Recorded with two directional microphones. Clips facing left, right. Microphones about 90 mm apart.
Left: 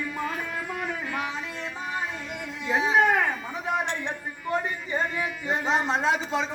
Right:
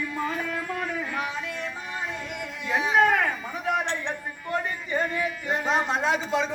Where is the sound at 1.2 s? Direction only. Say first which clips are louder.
Right 1 dB; 30° left (ahead or behind).